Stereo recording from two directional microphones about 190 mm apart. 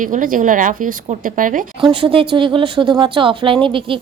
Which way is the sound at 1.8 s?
30° right (ahead or behind).